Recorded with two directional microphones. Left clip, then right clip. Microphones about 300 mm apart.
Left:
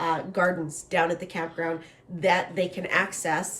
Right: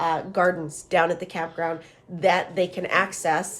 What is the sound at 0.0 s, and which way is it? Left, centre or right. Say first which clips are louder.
Speech: right 3 dB; centre.